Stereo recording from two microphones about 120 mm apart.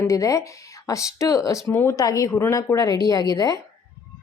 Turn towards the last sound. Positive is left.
turn(degrees=30)  # may be behind; listen again after turning